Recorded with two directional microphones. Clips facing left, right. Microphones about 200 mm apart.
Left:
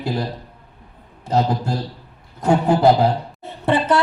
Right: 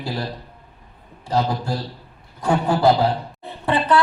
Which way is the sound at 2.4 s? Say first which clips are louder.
Left 3 dB; 20° left (ahead or behind).